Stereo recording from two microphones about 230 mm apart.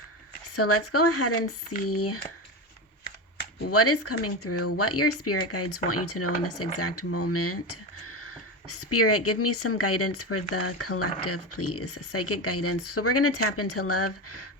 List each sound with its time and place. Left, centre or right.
0.4 s speech: left
3.7 s speech: left